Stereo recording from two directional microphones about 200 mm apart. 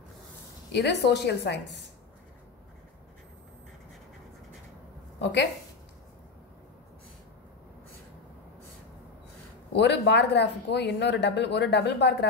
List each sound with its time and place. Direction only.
0.7 s speech: 55° left (ahead or behind)
5.2 s a woman's voice: 60° left (ahead or behind)
9.7 s speech: 60° left (ahead or behind)